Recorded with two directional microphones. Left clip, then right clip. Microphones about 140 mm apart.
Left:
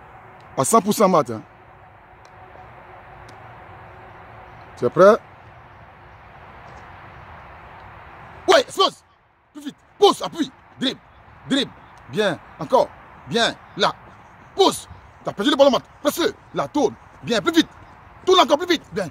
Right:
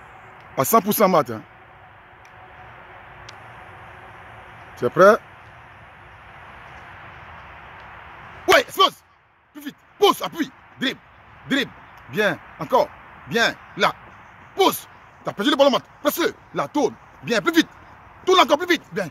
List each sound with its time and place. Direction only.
0.6 s speech: centre (ahead or behind)
4.7 s speech: centre (ahead or behind)
8.5 s a sound: centre (ahead or behind)
14.5 s speech: centre (ahead or behind)